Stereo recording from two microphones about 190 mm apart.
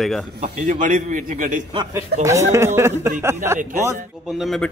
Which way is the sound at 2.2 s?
15° right (ahead or behind).